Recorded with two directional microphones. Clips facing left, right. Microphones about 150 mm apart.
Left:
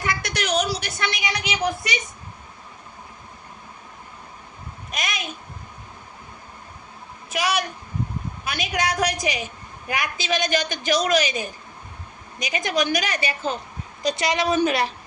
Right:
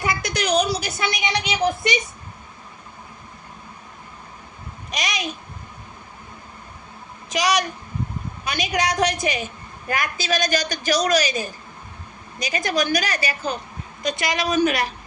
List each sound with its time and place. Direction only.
0.2 s a sound: centre (ahead or behind)
1.1 s speech: 25° right (ahead or behind)
4.9 s a woman's voice: centre (ahead or behind)
7.3 s a woman's voice: 5° left (ahead or behind); by 14.9 s 25° left (ahead or behind)